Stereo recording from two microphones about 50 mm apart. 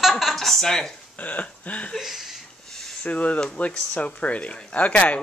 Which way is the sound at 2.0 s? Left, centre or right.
Centre.